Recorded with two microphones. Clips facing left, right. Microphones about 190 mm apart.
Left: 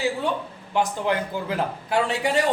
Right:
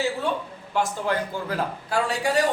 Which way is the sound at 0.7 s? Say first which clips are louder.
Left 2 dB; 20° left (ahead or behind).